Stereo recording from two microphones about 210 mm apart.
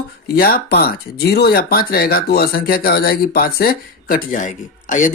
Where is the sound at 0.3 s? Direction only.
45° left (ahead or behind).